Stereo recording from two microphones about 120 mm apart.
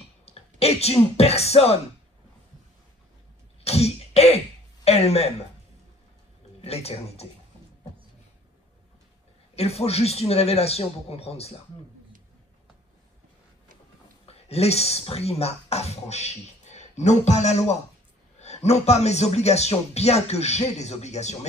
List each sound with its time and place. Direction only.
0.2 s speech: 60° left (ahead or behind)
3.6 s cough: 60° left (ahead or behind)
4.8 s a man's voice: 60° left (ahead or behind)
6.6 s a man's voice: 60° left (ahead or behind)
9.6 s a man's voice: 60° left (ahead or behind)
14.2 s speech: 60° left (ahead or behind)